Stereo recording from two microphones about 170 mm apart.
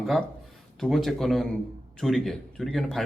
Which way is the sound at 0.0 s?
Centre (ahead or behind).